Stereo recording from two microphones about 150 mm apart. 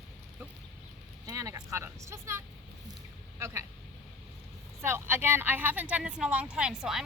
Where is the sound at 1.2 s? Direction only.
20° right (ahead or behind).